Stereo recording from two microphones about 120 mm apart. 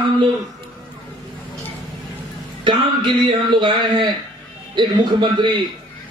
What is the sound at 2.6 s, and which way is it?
A man's voice, 40° right (ahead or behind).